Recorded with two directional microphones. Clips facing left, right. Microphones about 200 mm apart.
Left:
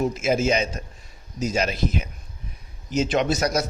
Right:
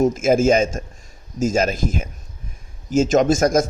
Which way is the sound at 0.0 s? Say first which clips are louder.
Right 6 dB; 45° right (ahead or behind).